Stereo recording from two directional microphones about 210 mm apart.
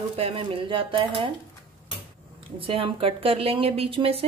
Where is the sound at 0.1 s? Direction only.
25° right (ahead or behind).